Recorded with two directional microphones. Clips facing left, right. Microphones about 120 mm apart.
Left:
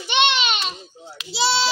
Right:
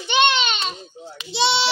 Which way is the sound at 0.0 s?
5° left (ahead or behind).